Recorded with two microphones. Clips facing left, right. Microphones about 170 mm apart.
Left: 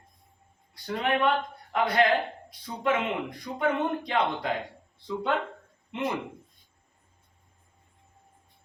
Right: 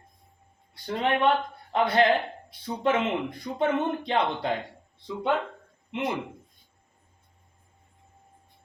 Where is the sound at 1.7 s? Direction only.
30° right (ahead or behind).